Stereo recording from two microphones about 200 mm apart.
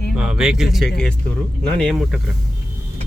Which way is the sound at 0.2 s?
5° right (ahead or behind).